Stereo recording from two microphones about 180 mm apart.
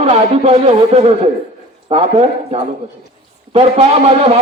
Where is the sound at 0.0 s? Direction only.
35° right (ahead or behind).